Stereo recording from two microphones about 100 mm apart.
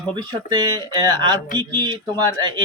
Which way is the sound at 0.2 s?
45° right (ahead or behind).